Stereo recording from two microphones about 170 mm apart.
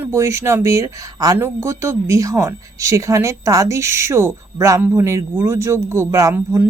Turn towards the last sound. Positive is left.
turn(degrees=-15)  # may be behind; listen again after turning